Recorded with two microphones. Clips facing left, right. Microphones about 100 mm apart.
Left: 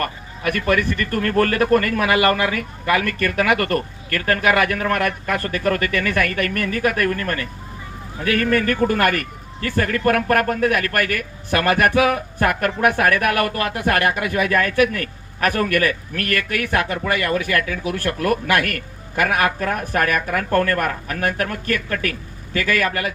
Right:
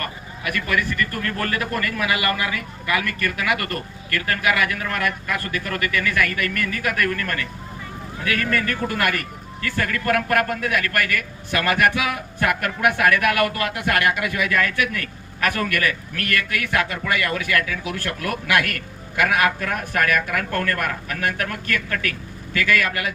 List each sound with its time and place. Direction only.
0.0 s a man's voice: 40° left (ahead or behind)